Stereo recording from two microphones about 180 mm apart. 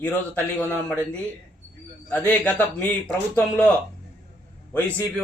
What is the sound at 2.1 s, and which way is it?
Speech, 10° left (ahead or behind).